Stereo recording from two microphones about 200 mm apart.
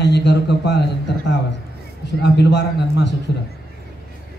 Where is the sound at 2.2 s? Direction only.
60° left (ahead or behind).